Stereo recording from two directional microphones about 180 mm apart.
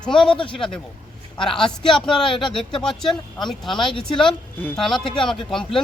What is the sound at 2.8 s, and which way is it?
Speech, centre (ahead or behind).